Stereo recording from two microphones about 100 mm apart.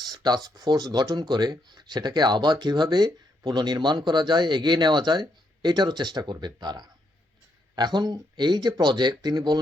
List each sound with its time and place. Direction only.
0.1 s speech: 40° right (ahead or behind)